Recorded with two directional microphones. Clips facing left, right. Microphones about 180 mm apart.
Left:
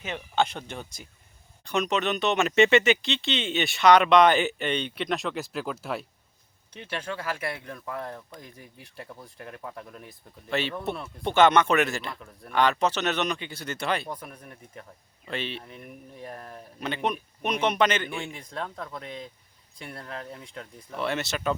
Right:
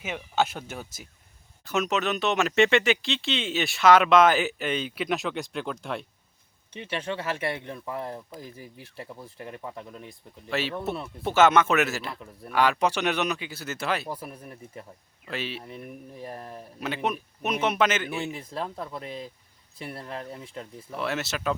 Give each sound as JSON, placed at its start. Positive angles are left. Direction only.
{"t": 0.0, "sound": "speech", "side_deg": -5}
{"t": 7.2, "sound": "speech", "side_deg": -30}
{"t": 8.5, "sound": "speech", "side_deg": -5}